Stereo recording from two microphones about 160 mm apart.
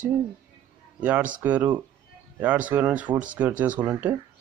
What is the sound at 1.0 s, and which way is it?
A man's voice, 10° right (ahead or behind).